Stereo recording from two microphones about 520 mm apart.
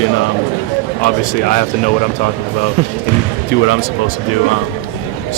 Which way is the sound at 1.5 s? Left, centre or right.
Centre.